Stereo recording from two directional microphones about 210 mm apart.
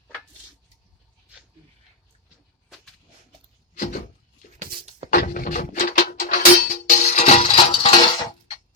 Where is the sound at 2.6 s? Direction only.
Centre (ahead or behind).